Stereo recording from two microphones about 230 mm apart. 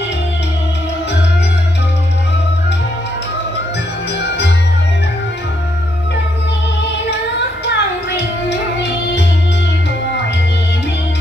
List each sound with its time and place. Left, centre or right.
4.2 s music: left
7.6 s music: left